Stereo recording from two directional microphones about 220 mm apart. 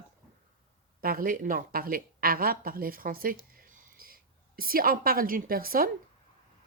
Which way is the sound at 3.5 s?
40° right (ahead or behind).